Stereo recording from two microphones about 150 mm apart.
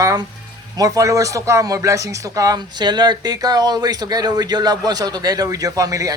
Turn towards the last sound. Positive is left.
turn(degrees=-25)  # may be behind; listen again after turning